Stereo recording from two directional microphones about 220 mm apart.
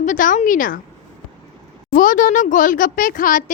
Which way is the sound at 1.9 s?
35° left (ahead or behind).